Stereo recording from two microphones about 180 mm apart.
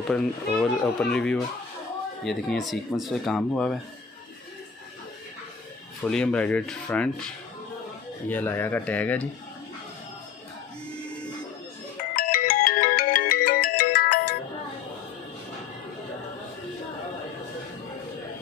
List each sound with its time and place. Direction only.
0.1 s speech: 5° left (ahead or behind)
6.0 s speech: 5° left (ahead or behind)
12.2 s ringtone: 55° left (ahead or behind)